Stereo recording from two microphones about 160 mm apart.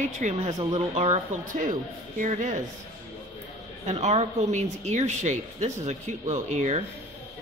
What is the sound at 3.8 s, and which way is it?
Speech, 45° right (ahead or behind).